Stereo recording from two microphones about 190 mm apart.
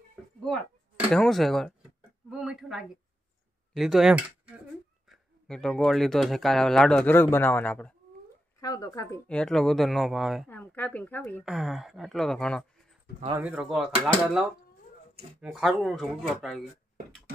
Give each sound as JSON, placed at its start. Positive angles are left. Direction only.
{"t": 1.1, "sound": "speech", "side_deg": 0}
{"t": 8.5, "sound": "speech", "side_deg": 20}
{"t": 9.3, "sound": "speech", "side_deg": 5}
{"t": 10.5, "sound": "speech", "side_deg": 10}
{"t": 11.4, "sound": "speech", "side_deg": 0}
{"t": 15.4, "sound": "speech", "side_deg": 0}